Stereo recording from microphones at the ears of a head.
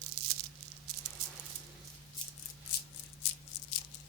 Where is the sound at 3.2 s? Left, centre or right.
Left.